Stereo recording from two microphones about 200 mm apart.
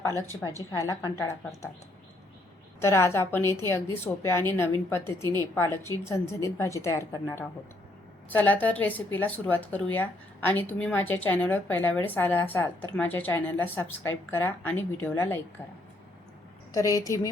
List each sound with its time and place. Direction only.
0.2 s a woman's voice: 10° left (ahead or behind)
2.8 s a woman's voice: 15° left (ahead or behind)
16.7 s a woman's voice: 15° left (ahead or behind)